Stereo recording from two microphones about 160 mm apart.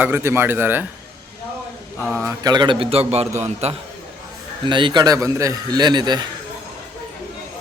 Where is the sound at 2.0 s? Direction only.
5° left (ahead or behind).